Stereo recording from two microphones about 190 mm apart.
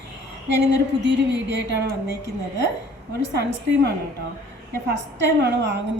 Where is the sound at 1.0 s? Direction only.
65° right (ahead or behind).